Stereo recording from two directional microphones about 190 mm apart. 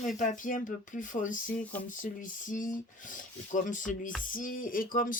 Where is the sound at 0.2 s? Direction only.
45° left (ahead or behind).